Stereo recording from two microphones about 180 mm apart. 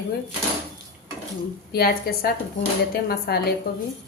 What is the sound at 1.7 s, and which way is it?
A woman's voice, 60° left (ahead or behind).